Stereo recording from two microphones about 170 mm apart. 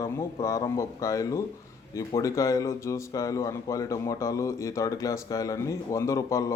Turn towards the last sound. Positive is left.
turn(degrees=20)  # may be behind; listen again after turning